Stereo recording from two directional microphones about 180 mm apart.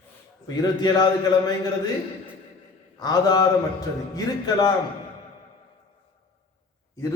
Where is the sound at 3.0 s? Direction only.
20° left (ahead or behind).